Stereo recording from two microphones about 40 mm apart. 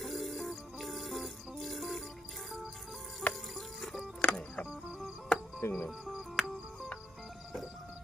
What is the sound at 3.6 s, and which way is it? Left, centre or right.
Music, centre.